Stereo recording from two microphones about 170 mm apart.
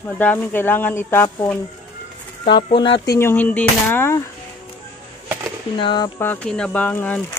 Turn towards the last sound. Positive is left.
turn(degrees=10)  # may be behind; listen again after turning